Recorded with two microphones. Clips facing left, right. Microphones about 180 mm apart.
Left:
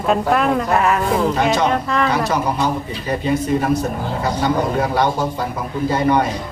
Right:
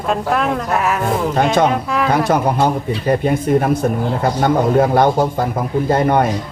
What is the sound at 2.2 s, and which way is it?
Speech, 55° right (ahead or behind).